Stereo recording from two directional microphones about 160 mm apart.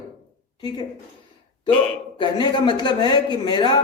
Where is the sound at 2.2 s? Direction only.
30° left (ahead or behind).